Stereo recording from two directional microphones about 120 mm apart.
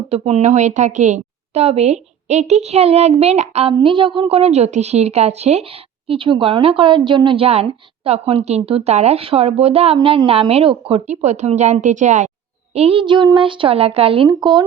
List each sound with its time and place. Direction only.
0.1 s a woman's voice: 60° right (ahead or behind)
3.8 s a woman's voice: 45° right (ahead or behind); by 5.6 s 65° right (ahead or behind)
6.1 s a woman's voice: 45° right (ahead or behind); by 12.3 s 90° right
12.7 s a woman's voice: 55° right (ahead or behind)
14.3 s speech: 40° right (ahead or behind)